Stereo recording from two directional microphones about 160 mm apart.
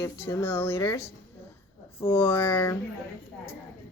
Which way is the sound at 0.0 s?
15° left (ahead or behind).